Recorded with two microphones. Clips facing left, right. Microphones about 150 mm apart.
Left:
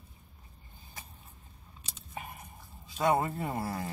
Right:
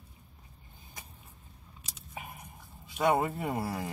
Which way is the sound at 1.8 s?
10° right (ahead or behind).